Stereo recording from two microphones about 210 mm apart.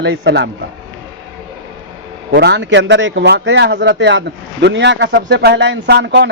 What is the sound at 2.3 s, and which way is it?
Speech, 55° right (ahead or behind).